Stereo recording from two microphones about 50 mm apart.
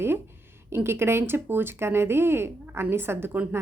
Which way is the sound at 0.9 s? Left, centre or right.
Right.